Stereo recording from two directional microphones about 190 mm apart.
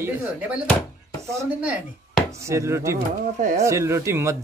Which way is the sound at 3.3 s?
40° right (ahead or behind).